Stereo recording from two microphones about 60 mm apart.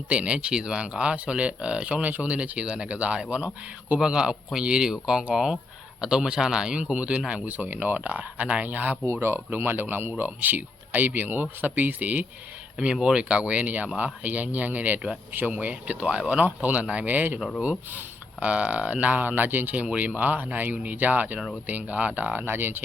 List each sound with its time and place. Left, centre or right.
0.1 s speech: centre
9.2 s speech: right
12.8 s speech: centre; by 22.8 s right